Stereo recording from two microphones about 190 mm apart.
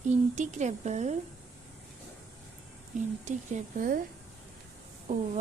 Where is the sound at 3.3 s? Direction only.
40° right (ahead or behind).